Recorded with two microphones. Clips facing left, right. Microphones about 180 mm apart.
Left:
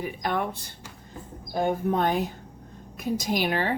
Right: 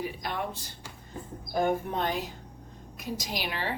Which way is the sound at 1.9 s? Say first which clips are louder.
Left 6 dB; 50° left (ahead or behind).